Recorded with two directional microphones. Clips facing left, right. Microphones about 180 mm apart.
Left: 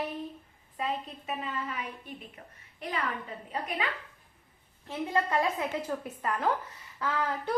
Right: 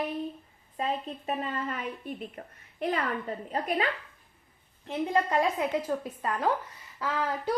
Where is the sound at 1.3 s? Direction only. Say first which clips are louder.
Right 4 dB; 45° right (ahead or behind).